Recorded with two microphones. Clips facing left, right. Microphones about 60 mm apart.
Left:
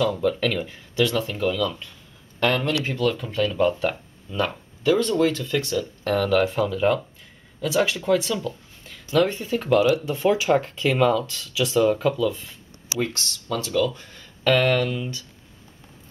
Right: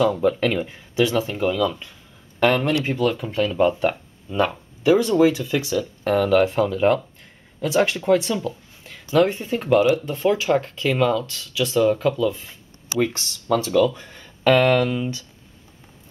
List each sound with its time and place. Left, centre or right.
0.0 s speech: centre
9.9 s speech: centre
13.5 s speech: centre
14.9 s speech: right